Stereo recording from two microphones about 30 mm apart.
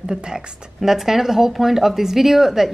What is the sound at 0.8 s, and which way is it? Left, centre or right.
Speech, centre.